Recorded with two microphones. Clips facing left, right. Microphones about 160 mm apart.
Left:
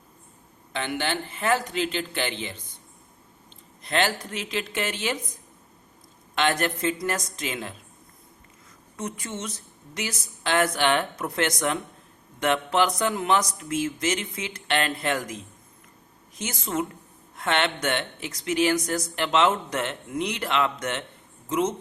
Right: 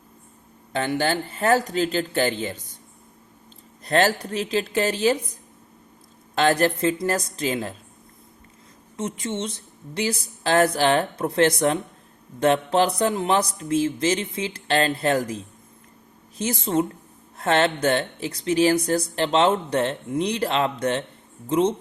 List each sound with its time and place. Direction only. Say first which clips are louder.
0.7 s speech: right 5 dB; 40° right (ahead or behind)
3.8 s speech: right 5 dB; 40° right (ahead or behind)
9.0 s speech: right 5 dB; 25° right (ahead or behind)
16.4 s speech: right 6 dB; 30° right (ahead or behind)